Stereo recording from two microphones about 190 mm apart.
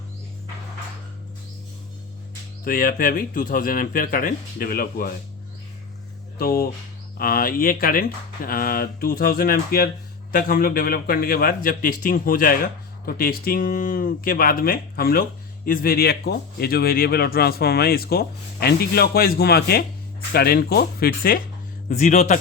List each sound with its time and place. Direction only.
2.6 s speech: 50° left (ahead or behind)
6.4 s speech: 55° left (ahead or behind)
21.8 s speech: 40° left (ahead or behind)